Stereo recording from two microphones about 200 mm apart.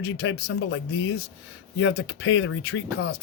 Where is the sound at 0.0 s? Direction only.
65° left (ahead or behind).